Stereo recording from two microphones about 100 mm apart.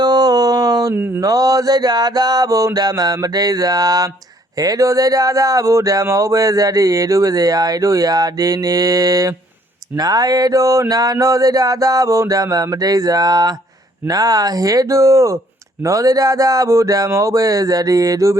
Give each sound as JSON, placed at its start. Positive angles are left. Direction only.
{"t": 0.0, "sound": "a sound", "side_deg": -45}
{"t": 0.9, "sound": "mantra", "side_deg": -20}
{"t": 1.2, "sound": "speech", "side_deg": -40}